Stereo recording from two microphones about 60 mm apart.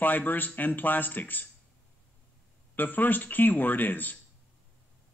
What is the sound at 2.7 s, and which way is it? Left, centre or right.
A man's voice, left.